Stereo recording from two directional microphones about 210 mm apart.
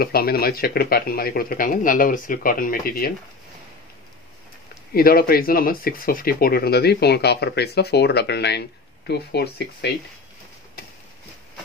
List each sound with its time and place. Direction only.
0.0 s speech: 45° left (ahead or behind)
4.9 s speech: 45° left (ahead or behind)